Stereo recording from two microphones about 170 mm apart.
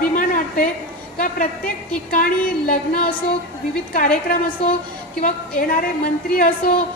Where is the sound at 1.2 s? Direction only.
55° left (ahead or behind).